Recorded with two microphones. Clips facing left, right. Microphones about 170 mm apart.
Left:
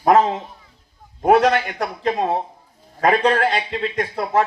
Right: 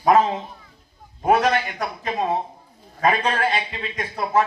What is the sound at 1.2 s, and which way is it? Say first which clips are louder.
Speech: left 4 dB; 65° left (ahead or behind).